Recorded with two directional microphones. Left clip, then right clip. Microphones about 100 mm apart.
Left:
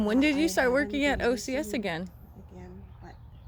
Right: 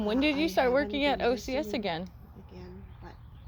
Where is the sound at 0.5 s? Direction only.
70° left (ahead or behind); by 2.0 s 50° left (ahead or behind).